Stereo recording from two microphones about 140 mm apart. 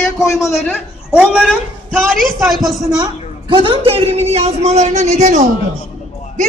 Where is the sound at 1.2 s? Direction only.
10° right (ahead or behind).